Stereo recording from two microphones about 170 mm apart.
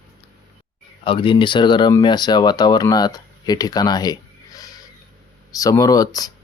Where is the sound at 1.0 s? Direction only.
30° left (ahead or behind).